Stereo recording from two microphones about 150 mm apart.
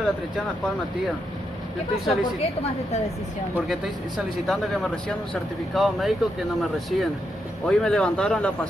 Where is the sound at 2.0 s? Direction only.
45° left (ahead or behind).